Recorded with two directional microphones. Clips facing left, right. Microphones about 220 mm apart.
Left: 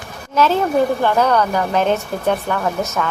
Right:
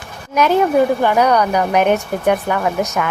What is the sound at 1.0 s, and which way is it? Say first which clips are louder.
Speech: right 2 dB; 15° right (ahead or behind).